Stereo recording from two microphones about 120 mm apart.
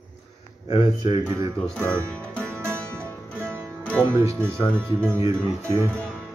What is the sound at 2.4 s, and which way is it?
Music, 20° right (ahead or behind).